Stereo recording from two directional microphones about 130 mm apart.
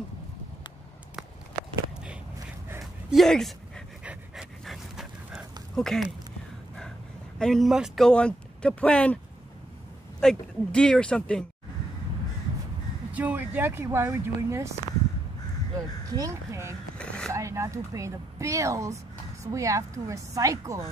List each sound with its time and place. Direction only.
2.8 s a sound: centre (ahead or behind)
4.0 s pant: 10° right (ahead or behind)
4.6 s dog: centre (ahead or behind)
7.3 s speech: 5° left (ahead or behind)
10.2 s speech: 5° left (ahead or behind)
13.1 s speech: 10° right (ahead or behind)
17.0 s a sound: 10° left (ahead or behind)
17.3 s speech: 20° right (ahead or behind)